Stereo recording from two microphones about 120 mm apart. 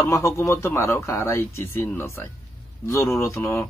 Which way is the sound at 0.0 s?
25° left (ahead or behind).